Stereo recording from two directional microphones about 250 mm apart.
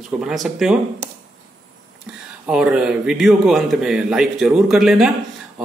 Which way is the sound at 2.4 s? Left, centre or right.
Centre.